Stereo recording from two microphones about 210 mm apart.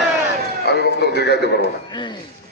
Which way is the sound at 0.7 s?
55° left (ahead or behind).